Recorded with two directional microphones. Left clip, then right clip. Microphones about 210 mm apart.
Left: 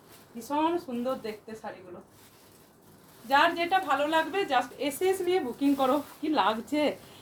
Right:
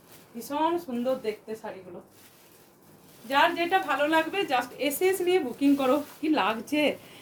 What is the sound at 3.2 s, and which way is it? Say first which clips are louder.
A woman's voice: even; 15° right (ahead or behind).